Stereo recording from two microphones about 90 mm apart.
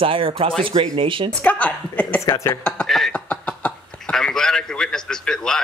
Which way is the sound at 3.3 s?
15° left (ahead or behind).